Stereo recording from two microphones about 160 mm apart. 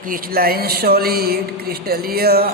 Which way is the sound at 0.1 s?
70° right (ahead or behind).